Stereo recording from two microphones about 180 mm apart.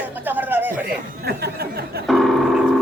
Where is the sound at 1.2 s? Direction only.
65° right (ahead or behind).